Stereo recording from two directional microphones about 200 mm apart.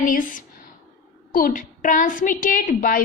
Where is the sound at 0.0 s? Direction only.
45° left (ahead or behind).